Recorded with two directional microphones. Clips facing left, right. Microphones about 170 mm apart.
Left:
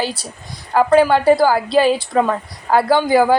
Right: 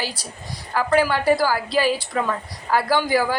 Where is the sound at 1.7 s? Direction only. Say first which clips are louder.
Left 7 dB; 25° left (ahead or behind).